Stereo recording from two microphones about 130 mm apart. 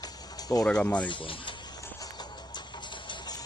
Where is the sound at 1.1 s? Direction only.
40° left (ahead or behind).